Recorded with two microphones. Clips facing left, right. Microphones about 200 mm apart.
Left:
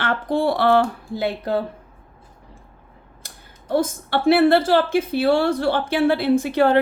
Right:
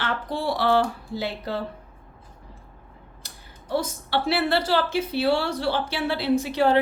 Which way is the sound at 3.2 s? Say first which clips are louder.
Left 1 dB; 50° left (ahead or behind).